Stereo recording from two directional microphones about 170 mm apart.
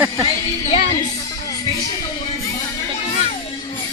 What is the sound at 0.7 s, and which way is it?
Speech, 35° left (ahead or behind).